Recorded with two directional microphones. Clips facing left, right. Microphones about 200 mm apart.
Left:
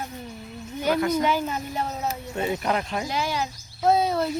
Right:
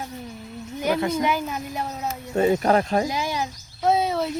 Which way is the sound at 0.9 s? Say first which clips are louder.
Left 3 dB; 25° right (ahead or behind).